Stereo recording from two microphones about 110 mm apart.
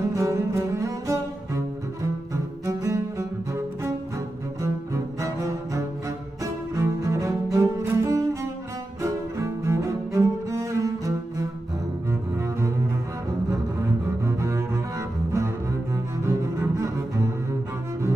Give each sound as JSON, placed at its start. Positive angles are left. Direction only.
{"t": 0.1, "sound": "cello", "side_deg": -25}
{"t": 2.3, "sound": "music", "side_deg": -25}
{"t": 4.6, "sound": "cello", "side_deg": -25}
{"t": 14.0, "sound": "double bass", "side_deg": -25}